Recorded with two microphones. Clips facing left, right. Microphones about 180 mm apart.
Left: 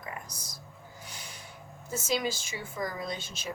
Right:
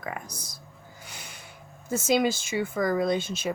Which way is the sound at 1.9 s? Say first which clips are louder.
Right 7 dB; 70° right (ahead or behind).